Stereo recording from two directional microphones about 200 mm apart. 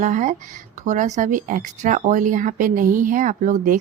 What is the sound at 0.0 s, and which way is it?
Speech, 40° right (ahead or behind).